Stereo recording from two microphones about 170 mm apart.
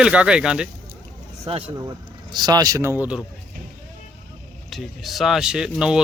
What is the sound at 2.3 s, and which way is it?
Speech, 25° right (ahead or behind).